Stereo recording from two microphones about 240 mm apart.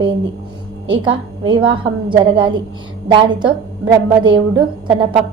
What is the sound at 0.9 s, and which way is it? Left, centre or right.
A woman's voice, right.